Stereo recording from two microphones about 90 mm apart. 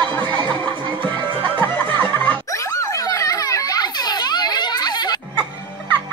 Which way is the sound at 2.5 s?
35° left (ahead or behind).